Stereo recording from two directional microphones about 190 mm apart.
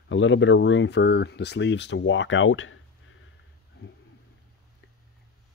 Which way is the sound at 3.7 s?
60° left (ahead or behind).